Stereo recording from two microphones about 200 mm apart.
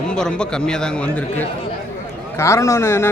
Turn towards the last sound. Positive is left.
turn(degrees=10)  # may be behind; listen again after turning